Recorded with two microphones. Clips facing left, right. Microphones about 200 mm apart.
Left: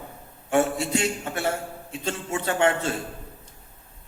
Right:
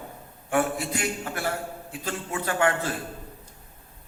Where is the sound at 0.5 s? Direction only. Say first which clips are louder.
Left 3 dB; 25° left (ahead or behind).